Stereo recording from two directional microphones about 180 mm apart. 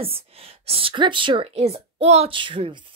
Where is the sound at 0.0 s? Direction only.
30° right (ahead or behind).